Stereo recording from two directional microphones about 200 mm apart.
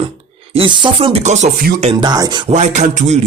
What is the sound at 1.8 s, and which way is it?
Speech, 25° right (ahead or behind).